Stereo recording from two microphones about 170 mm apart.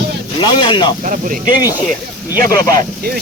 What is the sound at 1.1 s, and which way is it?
Speech, 50° right (ahead or behind).